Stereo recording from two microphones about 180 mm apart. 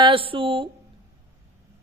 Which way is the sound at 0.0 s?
30° right (ahead or behind).